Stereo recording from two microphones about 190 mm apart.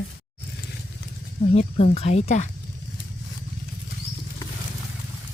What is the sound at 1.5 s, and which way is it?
Speech, 35° left (ahead or behind).